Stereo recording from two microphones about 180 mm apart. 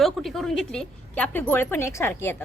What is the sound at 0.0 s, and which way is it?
Speech, centre (ahead or behind).